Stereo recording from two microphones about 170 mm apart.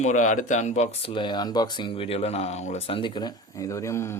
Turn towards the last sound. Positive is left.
turn(degrees=15)  # may be behind; listen again after turning